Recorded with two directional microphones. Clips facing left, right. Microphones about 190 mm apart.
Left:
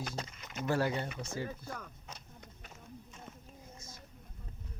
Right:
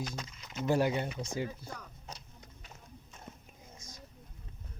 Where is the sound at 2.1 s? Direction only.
55° left (ahead or behind).